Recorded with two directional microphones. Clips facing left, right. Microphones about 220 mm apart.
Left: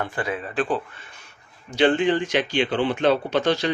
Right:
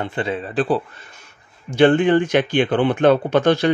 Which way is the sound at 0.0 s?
25° right (ahead or behind).